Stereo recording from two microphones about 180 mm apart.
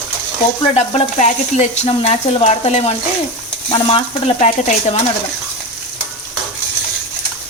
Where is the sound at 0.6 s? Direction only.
35° left (ahead or behind).